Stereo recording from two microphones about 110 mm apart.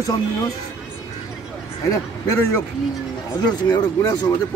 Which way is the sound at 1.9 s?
30° left (ahead or behind).